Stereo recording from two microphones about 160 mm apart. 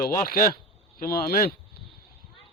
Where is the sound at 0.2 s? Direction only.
65° left (ahead or behind).